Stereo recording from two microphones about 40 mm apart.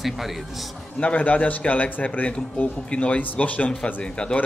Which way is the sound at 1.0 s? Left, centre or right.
Left.